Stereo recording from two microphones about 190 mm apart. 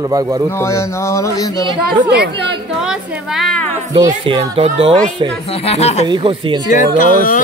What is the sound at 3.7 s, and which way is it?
Speech, 35° right (ahead or behind).